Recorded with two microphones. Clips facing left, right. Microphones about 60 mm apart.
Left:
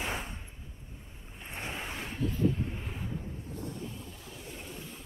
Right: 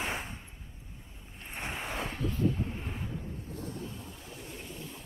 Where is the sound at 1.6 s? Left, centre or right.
Right.